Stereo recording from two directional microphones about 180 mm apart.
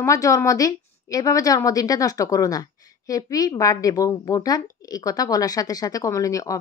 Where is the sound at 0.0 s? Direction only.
20° left (ahead or behind).